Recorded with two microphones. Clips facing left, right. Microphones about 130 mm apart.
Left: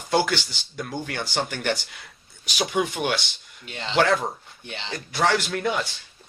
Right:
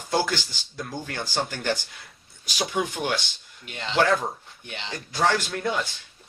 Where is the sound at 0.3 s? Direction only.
70° left (ahead or behind).